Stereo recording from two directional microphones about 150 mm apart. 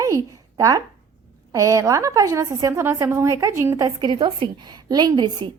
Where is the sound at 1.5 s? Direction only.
25° right (ahead or behind).